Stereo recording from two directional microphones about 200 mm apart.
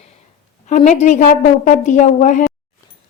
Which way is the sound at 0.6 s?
35° left (ahead or behind).